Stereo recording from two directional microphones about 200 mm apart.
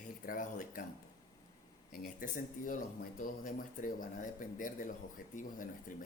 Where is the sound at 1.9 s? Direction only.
45° left (ahead or behind).